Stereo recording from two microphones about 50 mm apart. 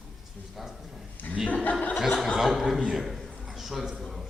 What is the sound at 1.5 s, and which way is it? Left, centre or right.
Chuckle, left.